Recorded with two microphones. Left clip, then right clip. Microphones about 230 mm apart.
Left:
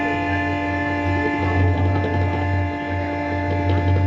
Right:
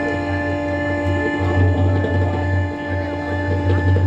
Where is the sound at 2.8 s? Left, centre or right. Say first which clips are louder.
Even; left.